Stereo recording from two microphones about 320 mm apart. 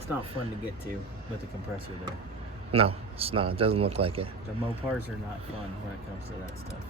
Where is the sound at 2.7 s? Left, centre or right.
Centre.